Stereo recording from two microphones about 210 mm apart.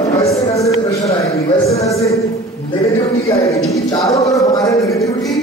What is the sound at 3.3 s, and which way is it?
A man's voice, 15° left (ahead or behind).